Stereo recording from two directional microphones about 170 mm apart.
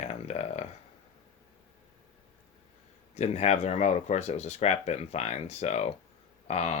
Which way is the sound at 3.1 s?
40° left (ahead or behind).